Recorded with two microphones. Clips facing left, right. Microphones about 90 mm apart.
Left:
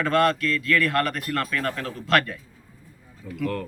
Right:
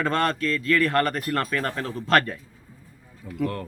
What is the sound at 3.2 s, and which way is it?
Speech, 15° right (ahead or behind).